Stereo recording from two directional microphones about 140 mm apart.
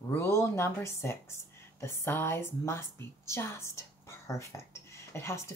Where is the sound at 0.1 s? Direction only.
20° left (ahead or behind).